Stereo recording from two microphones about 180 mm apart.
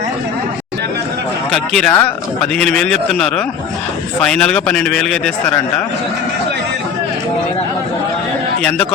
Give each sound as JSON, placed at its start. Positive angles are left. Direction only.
{"t": 1.5, "sound": "speech", "side_deg": 5}